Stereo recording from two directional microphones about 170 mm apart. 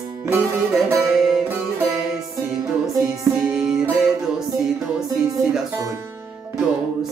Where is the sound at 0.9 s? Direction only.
Centre (ahead or behind).